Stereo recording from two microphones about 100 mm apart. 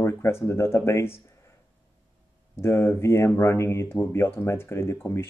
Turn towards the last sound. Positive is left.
turn(degrees=25)  # may be behind; listen again after turning